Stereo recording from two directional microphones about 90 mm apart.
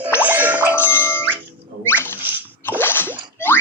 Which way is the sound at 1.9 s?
25° left (ahead or behind).